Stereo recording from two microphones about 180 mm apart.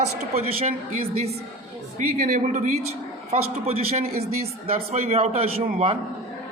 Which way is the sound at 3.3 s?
35° right (ahead or behind).